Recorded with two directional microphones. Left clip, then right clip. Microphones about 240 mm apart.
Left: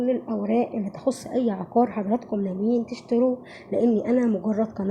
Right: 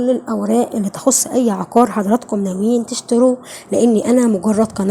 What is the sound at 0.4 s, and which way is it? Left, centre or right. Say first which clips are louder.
Speech: right 7 dB; right.